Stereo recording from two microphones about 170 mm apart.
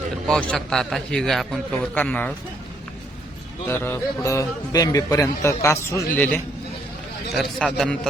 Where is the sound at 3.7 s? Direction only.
10° left (ahead or behind).